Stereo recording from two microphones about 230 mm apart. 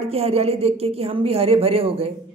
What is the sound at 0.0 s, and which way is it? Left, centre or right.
A man's voice, right.